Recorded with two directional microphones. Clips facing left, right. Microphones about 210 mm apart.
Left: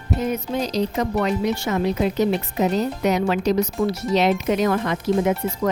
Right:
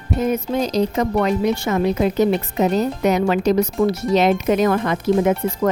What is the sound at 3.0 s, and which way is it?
Speech, 50° right (ahead or behind).